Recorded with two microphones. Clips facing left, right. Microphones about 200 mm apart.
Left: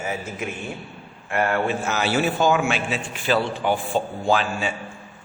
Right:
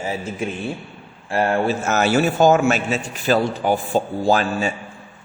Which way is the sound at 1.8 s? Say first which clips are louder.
Right 4 dB; 45° right (ahead or behind).